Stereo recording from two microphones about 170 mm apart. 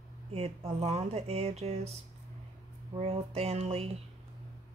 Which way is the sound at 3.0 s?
35° right (ahead or behind).